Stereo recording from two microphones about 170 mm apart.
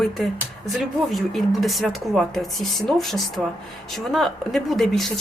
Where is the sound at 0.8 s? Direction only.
Centre (ahead or behind).